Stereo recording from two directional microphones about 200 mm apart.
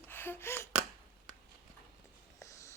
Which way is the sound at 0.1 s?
10° left (ahead or behind).